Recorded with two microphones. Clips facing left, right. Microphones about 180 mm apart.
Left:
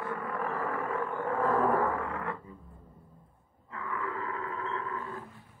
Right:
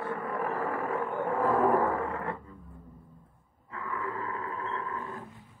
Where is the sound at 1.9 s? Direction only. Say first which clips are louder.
Right 2 dB; 35° right (ahead or behind).